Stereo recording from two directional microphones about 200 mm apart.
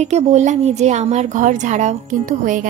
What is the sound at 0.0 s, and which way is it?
A woman's voice, 35° right (ahead or behind).